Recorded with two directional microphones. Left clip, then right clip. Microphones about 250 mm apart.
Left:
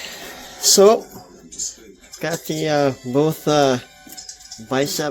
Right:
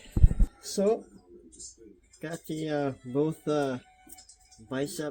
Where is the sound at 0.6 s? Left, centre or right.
Left.